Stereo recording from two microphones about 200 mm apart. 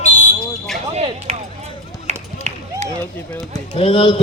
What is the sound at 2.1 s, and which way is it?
Run, 35° right (ahead or behind).